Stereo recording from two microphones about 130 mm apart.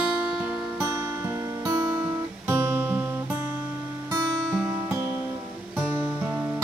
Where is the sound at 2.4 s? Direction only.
15° right (ahead or behind).